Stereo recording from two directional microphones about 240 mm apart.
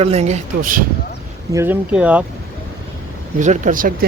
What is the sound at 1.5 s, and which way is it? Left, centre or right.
Speech, centre.